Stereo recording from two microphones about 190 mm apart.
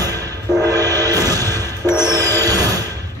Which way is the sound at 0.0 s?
20° right (ahead or behind).